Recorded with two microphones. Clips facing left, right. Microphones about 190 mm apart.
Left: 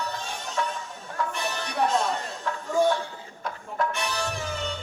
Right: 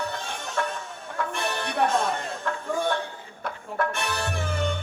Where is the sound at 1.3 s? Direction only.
55° right (ahead or behind).